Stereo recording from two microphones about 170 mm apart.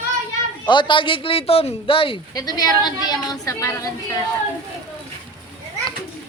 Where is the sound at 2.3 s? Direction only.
20° left (ahead or behind).